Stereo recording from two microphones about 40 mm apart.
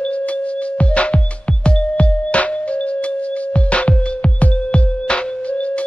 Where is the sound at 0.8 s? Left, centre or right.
Left.